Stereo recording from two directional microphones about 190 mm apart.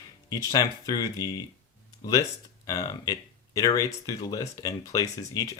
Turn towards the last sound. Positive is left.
turn(degrees=15)  # may be behind; listen again after turning